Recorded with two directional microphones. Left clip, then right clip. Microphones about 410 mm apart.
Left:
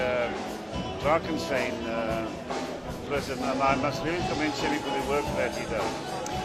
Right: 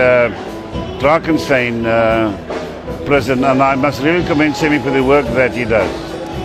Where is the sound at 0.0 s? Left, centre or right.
Right.